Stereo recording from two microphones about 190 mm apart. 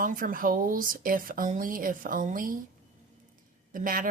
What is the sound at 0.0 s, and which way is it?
Speech, 45° right (ahead or behind).